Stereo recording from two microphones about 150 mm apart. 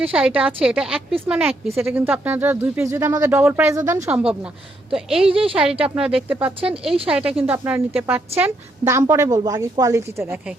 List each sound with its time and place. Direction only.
0.0 s speech: 10° right (ahead or behind)
4.1 s a woman's voice: 5° right (ahead or behind)
5.3 s a woman's voice: 40° right (ahead or behind)
5.5 s a woman's voice: 5° right (ahead or behind)